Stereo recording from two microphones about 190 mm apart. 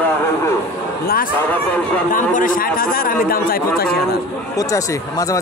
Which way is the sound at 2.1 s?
45° left (ahead or behind).